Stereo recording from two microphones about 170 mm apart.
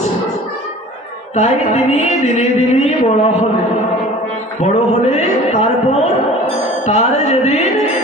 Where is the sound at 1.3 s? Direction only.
40° left (ahead or behind).